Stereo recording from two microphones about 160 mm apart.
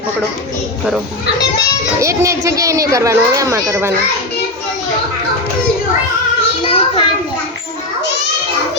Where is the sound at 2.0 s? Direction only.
20° right (ahead or behind).